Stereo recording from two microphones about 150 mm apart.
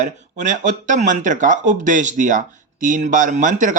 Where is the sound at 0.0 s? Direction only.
55° right (ahead or behind).